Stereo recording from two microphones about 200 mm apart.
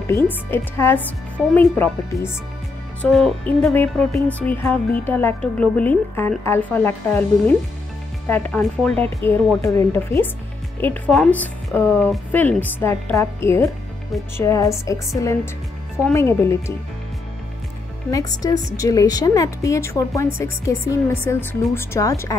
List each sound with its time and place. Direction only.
0.1 s speech: 10° left (ahead or behind)
10.8 s speech: 5° left (ahead or behind)
18.1 s speech: 20° left (ahead or behind)